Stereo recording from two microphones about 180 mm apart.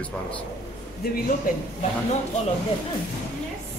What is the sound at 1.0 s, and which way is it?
Speech, 60° left (ahead or behind).